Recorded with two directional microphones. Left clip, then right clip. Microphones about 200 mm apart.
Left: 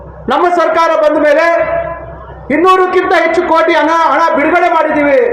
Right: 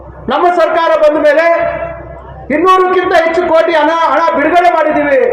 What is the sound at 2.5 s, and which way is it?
A man's voice, 55° left (ahead or behind).